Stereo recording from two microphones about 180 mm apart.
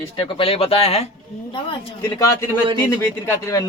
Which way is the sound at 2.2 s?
15° left (ahead or behind).